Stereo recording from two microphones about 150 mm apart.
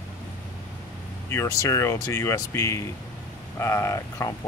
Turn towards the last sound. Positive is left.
turn(degrees=20)  # may be behind; listen again after turning